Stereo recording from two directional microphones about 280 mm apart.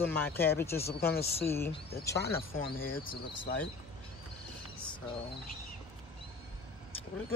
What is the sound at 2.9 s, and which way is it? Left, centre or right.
Speech, centre.